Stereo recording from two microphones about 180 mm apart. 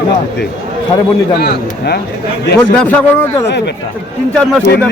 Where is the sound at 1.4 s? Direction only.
60° left (ahead or behind).